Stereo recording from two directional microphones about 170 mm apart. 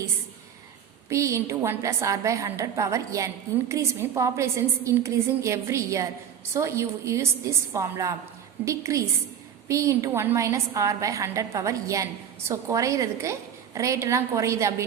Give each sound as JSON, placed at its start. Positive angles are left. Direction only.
{"t": 1.1, "sound": "a woman's voice", "side_deg": -15}